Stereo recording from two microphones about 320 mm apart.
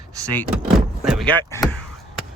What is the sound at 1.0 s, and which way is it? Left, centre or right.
Speech, centre.